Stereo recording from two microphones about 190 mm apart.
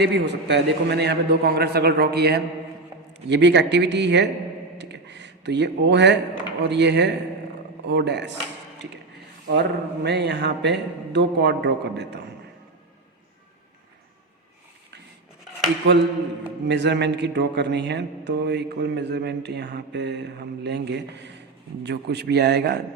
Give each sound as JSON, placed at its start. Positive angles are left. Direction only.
{"t": 0.0, "sound": "speech", "side_deg": -65}
{"t": 4.8, "sound": "a sound", "side_deg": -65}
{"t": 6.6, "sound": "speech", "side_deg": -65}
{"t": 9.5, "sound": "speech", "side_deg": -60}
{"t": 15.9, "sound": "speech", "side_deg": -65}